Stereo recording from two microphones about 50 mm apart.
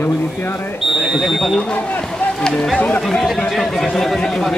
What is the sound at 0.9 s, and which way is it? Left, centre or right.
Speech, centre.